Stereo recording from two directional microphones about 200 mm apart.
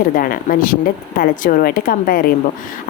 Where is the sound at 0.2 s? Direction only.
45° left (ahead or behind).